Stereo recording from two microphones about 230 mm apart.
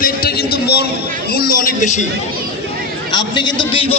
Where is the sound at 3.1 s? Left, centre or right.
Centre.